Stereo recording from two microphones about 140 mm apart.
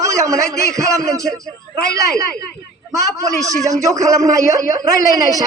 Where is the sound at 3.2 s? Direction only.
25° right (ahead or behind).